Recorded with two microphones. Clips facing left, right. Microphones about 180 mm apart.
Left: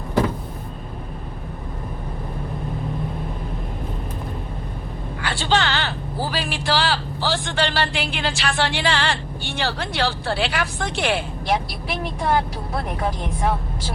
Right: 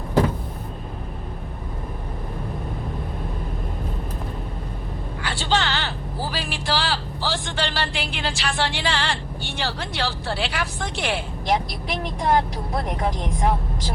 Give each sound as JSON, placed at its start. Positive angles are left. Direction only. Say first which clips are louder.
{"t": 5.2, "sound": "vehicle", "louder": "left 2 dB", "side_deg": 65}
{"t": 6.3, "sound": "speech", "louder": "left 3 dB", "side_deg": 65}